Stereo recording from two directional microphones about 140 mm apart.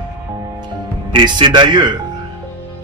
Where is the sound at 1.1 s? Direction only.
35° right (ahead or behind).